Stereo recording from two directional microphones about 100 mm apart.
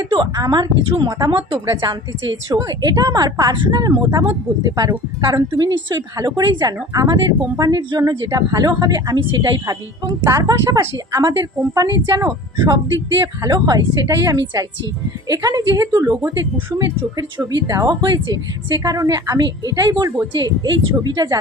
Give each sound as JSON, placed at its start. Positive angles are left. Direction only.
{"t": 0.0, "sound": "a woman's voice", "side_deg": -45}
{"t": 1.3, "sound": "a woman's voice", "side_deg": -55}
{"t": 1.5, "sound": "a woman's voice", "side_deg": -25}
{"t": 2.5, "sound": "a woman's voice", "side_deg": -40}
{"t": 10.2, "sound": "a woman's voice", "side_deg": -35}
{"t": 18.8, "sound": "a woman's voice", "side_deg": -35}